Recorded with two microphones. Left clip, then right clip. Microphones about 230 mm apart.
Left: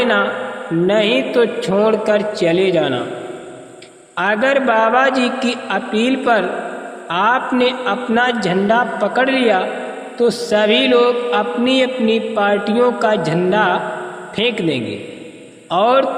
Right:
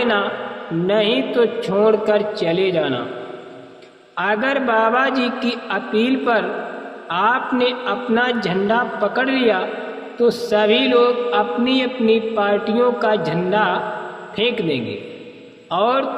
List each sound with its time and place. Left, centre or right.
0.0 s a sound: left
0.9 s mantra: left
4.2 s mantra: left